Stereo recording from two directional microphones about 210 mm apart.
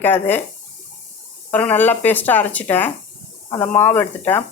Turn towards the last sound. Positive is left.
turn(degrees=10)  # may be behind; listen again after turning